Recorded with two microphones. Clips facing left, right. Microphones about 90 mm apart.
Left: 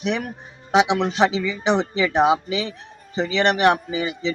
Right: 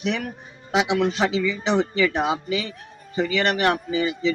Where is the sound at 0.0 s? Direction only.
20° left (ahead or behind).